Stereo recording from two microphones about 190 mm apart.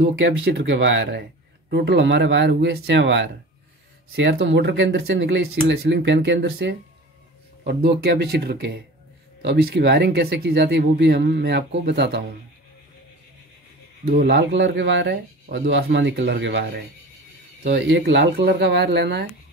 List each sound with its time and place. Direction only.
0.5 s speech: 70° right (ahead or behind)
8.0 s speech: 60° right (ahead or behind)
14.2 s speech: 65° right (ahead or behind)
15.4 s speech: 50° right (ahead or behind)
15.7 s speech: 70° right (ahead or behind)